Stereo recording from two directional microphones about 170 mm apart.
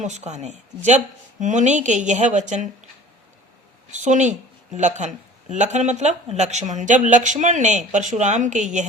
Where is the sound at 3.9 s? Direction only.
45° right (ahead or behind).